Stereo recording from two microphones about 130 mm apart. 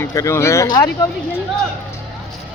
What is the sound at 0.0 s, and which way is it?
Speech, 25° left (ahead or behind).